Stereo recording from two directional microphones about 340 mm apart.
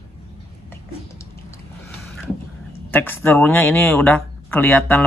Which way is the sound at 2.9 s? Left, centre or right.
Centre.